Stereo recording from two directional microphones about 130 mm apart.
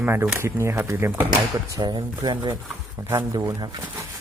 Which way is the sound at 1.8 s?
35° right (ahead or behind).